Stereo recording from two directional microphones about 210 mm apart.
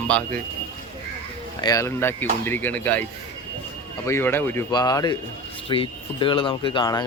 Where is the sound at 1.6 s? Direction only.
15° left (ahead or behind).